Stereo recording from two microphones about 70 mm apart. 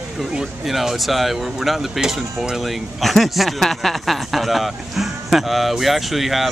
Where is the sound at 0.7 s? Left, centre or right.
Centre.